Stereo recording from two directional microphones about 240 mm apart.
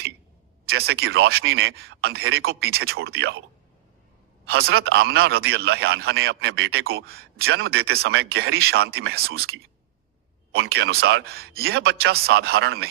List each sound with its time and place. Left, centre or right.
0.6 s speech: right
4.4 s speech: right
10.5 s speech: right